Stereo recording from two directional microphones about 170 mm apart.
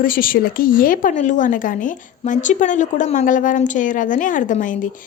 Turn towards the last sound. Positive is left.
turn(degrees=50)  # may be behind; listen again after turning